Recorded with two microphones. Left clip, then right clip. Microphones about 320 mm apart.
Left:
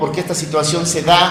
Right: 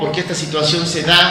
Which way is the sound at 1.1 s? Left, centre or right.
Left.